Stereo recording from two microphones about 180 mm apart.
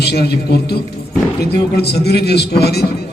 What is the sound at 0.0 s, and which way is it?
A man's voice, 65° left (ahead or behind).